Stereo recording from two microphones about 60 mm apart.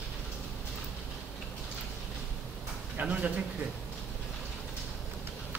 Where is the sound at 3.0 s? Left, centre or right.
Right.